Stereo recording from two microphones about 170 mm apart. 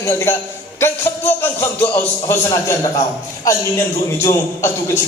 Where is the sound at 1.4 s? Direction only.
15° left (ahead or behind).